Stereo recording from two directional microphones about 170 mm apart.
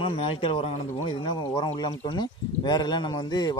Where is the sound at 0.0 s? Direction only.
30° left (ahead or behind).